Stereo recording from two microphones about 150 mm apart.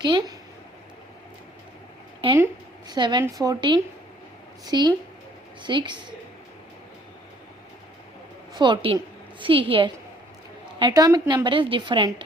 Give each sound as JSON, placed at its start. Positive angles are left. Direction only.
{"t": 0.0, "sound": "a woman's voice", "side_deg": -30}
{"t": 2.2, "sound": "a woman's voice", "side_deg": -35}
{"t": 8.5, "sound": "a woman's voice", "side_deg": -30}
{"t": 10.9, "sound": "a woman's voice", "side_deg": -25}